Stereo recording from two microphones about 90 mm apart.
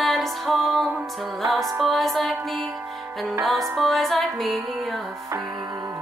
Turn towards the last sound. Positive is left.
turn(degrees=0)  # may be behind; listen again after turning